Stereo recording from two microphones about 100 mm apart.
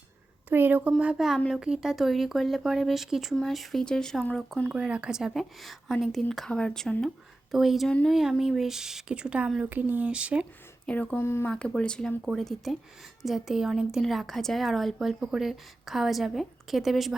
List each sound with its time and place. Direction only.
0.5 s a woman's voice: 20° right (ahead or behind); by 4.7 s 10° left (ahead or behind)
4.7 s a woman's voice: 10° right (ahead or behind)
10.8 s speech: 15° left (ahead or behind)
11.5 s a woman's voice: 10° left (ahead or behind)